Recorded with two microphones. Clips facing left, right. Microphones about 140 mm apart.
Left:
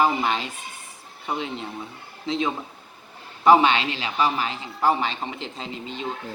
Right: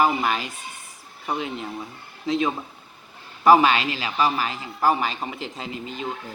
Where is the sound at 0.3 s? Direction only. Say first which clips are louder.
Even; 25° left (ahead or behind).